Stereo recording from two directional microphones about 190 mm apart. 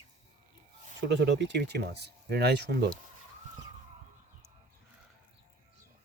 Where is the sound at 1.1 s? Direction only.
70° right (ahead or behind).